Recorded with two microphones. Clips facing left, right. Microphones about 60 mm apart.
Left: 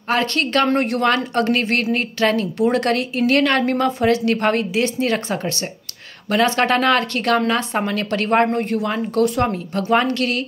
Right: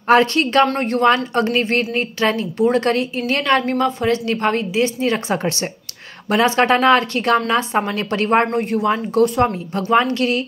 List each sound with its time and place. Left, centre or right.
0.1 s a woman's voice: centre
6.3 s speech: centre
8.5 s speech: centre